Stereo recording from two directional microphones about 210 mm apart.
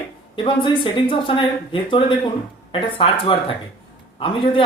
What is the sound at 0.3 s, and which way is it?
Speech, 25° left (ahead or behind).